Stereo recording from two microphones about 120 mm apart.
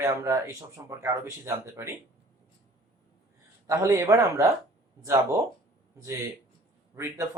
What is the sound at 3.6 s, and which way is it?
Speech, 25° right (ahead or behind).